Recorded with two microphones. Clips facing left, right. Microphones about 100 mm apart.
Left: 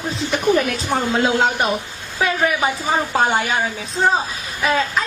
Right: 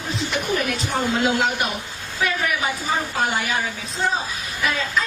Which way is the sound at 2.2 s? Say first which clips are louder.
Left 5 dB; 25° left (ahead or behind).